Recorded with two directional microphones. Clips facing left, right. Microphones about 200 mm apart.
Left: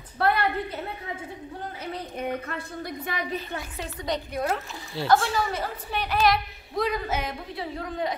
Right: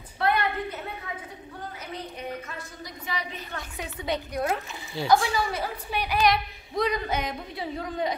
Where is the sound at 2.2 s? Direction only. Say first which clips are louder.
Left 5 dB; 60° left (ahead or behind).